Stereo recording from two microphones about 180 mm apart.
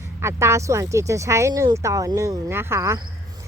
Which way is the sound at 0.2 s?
15° right (ahead or behind).